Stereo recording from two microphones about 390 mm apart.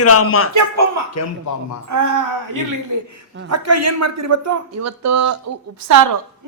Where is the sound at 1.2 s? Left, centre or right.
Left.